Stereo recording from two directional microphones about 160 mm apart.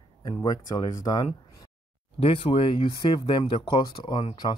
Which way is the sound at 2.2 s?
35° left (ahead or behind).